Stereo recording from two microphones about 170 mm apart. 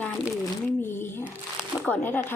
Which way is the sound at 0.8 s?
15° left (ahead or behind).